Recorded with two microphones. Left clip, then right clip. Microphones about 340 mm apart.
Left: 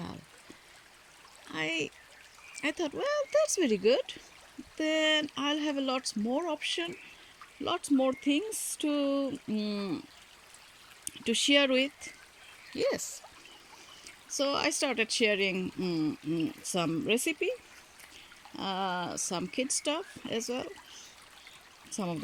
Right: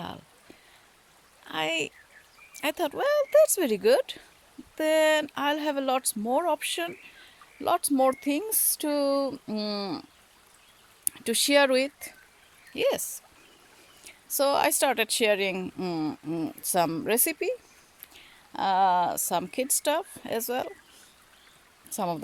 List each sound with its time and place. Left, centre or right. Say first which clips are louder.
1.5 s a sound: right 5 dB; centre
2.6 s speech: right 5 dB; centre
11.3 s speech: right 4 dB; centre
18.5 s speech: right 11 dB; centre
21.9 s speech: right 7 dB; centre